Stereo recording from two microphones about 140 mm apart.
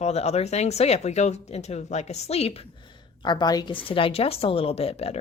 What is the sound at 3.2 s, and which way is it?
Speech, 30° left (ahead or behind).